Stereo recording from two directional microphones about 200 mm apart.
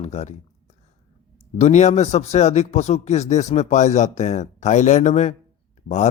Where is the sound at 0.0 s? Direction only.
35° left (ahead or behind).